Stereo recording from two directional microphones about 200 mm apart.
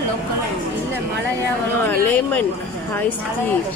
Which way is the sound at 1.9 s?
10° left (ahead or behind).